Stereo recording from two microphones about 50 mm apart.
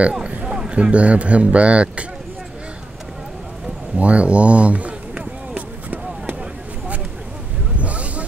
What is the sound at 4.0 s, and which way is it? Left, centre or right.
Speech, right.